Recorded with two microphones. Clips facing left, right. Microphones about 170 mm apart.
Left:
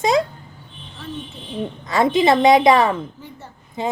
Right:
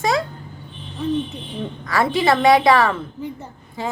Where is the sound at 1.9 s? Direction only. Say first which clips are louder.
Left 2 dB; 20° left (ahead or behind).